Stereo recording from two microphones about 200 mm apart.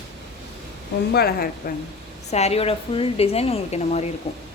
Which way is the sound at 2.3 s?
30° left (ahead or behind).